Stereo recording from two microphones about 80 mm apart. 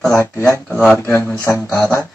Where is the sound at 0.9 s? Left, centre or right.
Left.